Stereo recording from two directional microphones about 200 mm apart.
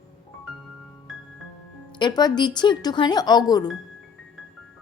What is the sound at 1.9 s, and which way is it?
Speech, 20° left (ahead or behind).